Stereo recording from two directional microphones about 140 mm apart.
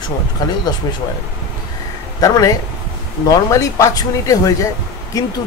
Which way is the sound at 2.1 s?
25° left (ahead or behind).